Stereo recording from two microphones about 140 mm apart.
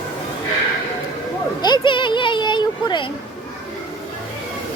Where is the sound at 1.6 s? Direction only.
35° left (ahead or behind).